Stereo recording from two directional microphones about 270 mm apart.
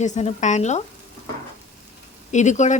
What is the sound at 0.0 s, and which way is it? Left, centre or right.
Speech, left.